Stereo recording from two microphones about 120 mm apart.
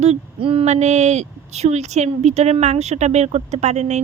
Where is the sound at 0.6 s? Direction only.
70° right (ahead or behind).